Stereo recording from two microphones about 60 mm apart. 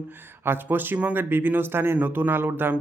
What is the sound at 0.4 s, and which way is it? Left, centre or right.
Speech, right.